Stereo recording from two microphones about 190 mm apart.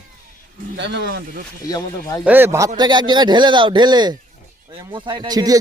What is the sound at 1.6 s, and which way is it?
Speech, 20° left (ahead or behind).